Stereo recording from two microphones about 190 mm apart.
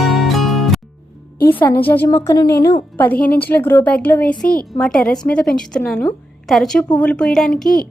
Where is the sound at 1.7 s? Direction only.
10° left (ahead or behind).